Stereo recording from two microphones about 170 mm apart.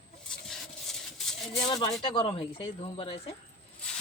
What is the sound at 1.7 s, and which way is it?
Speech, 30° left (ahead or behind).